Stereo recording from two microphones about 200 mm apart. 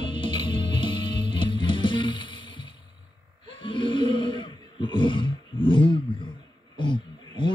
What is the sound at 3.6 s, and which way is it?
Roar, 25° left (ahead or behind).